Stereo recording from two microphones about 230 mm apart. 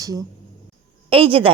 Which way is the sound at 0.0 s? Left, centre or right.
Centre.